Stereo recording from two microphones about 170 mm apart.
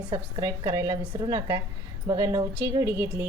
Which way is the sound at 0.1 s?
20° right (ahead or behind).